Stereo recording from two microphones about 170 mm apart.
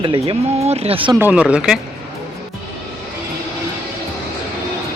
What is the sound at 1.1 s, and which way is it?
Speech, 10° right (ahead or behind).